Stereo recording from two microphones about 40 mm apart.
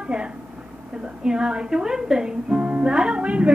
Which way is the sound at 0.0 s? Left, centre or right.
Right.